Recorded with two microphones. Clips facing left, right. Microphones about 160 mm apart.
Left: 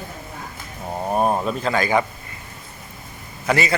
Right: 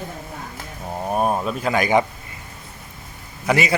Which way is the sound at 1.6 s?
20° right (ahead or behind).